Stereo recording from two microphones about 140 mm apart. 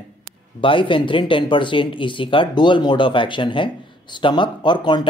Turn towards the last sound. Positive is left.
turn(degrees=35)  # may be behind; listen again after turning